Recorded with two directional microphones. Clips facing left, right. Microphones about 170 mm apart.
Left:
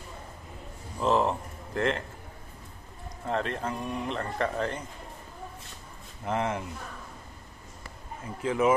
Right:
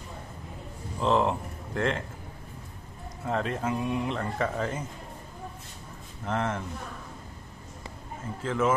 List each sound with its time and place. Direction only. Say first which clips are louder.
1.0 s speech: even; centre (ahead or behind)
3.3 s speech: right 1 dB; centre (ahead or behind)
6.2 s speech: left 1 dB; 10° left (ahead or behind)
8.4 s speech: left 2 dB; 15° left (ahead or behind)